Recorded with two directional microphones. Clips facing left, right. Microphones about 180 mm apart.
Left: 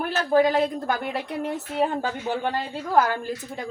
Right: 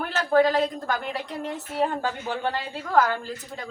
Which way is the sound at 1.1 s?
60° left (ahead or behind).